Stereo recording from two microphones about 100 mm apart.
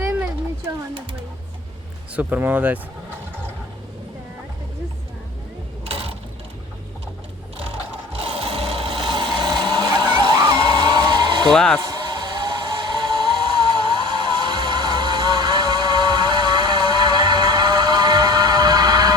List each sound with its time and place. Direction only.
0.0 s a sound: 15° right (ahead or behind)
2.1 s speech: 15° right (ahead or behind)
5.8 s mechanisms: 70° right (ahead or behind)
8.2 s a sound: 70° right (ahead or behind); by 11.5 s 50° right (ahead or behind)
11.5 s speech: 5° left (ahead or behind)
11.8 s vehicle: 45° right (ahead or behind)